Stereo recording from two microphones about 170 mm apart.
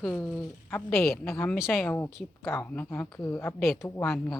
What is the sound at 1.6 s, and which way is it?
Speech, 5° right (ahead or behind).